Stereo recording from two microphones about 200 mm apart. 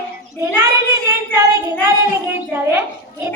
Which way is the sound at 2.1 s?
10° right (ahead or behind).